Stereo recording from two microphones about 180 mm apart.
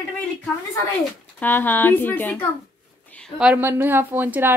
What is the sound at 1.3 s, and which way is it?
A woman's voice, 10° left (ahead or behind).